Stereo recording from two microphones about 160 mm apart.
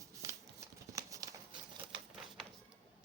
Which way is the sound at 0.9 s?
20° right (ahead or behind).